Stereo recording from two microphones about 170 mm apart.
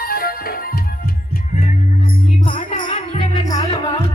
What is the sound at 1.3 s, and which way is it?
Music, 50° left (ahead or behind).